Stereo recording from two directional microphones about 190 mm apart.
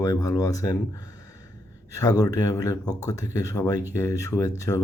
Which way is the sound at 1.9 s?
20° left (ahead or behind).